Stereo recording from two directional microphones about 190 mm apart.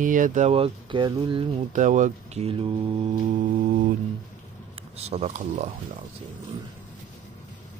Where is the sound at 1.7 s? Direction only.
40° right (ahead or behind).